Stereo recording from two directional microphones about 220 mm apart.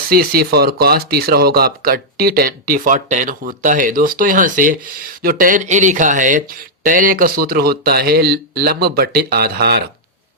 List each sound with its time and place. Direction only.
0.1 s speech: 45° right (ahead or behind)